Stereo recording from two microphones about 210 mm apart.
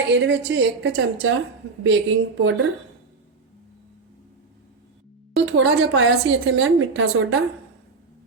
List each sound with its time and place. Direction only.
0.1 s a woman's voice: 60° right (ahead or behind)
5.5 s a woman's voice: 65° right (ahead or behind)